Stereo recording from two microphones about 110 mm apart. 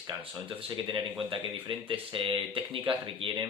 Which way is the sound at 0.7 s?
50° right (ahead or behind).